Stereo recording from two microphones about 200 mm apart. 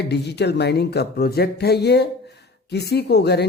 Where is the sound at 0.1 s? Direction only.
60° left (ahead or behind).